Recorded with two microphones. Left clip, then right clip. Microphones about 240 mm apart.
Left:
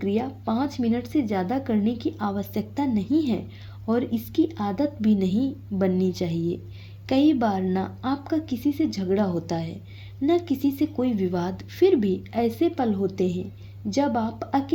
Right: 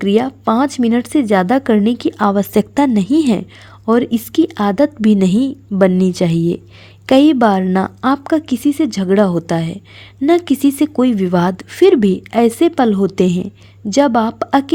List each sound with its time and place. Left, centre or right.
0.0 s speech: right